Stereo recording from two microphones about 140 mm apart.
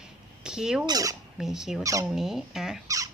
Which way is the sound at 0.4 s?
5° right (ahead or behind).